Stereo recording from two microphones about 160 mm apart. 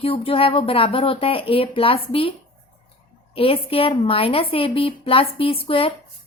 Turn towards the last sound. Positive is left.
turn(degrees=35)  # may be behind; listen again after turning